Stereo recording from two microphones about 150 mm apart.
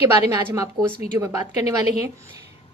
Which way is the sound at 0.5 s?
25° right (ahead or behind).